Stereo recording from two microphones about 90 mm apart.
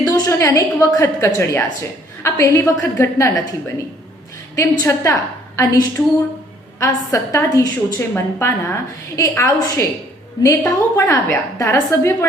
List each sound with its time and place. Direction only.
0.0 s a woman's voice: 40° left (ahead or behind)
4.5 s a woman's voice: 40° left (ahead or behind)
6.7 s a woman's voice: 35° left (ahead or behind)